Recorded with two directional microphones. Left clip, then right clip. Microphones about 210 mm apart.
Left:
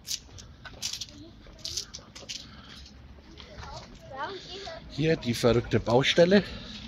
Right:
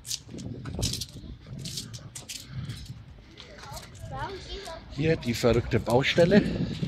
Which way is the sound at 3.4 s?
50° right (ahead or behind).